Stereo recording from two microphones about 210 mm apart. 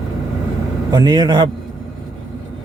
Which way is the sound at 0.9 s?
20° right (ahead or behind).